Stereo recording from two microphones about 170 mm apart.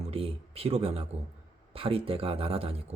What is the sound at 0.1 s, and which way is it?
Speech, 35° right (ahead or behind).